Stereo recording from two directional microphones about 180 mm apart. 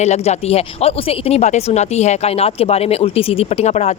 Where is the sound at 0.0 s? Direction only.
40° left (ahead or behind).